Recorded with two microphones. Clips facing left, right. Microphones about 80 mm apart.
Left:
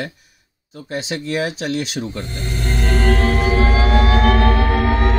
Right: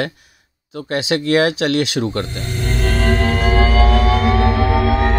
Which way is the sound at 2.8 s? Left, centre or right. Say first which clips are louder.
Even; centre.